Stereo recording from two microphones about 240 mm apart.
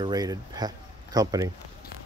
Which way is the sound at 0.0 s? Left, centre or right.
Centre.